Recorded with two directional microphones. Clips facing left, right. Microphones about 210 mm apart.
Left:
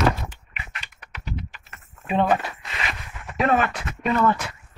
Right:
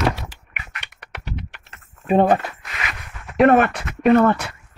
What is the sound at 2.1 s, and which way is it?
Speech, 40° right (ahead or behind).